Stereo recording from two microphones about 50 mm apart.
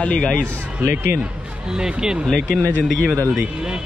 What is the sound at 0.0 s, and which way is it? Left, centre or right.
Speech, left.